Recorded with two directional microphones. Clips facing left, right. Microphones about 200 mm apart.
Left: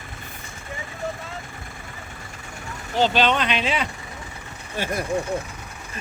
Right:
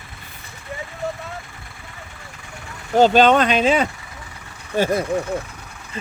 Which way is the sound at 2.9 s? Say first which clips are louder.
Right 7 dB; 45° right (ahead or behind).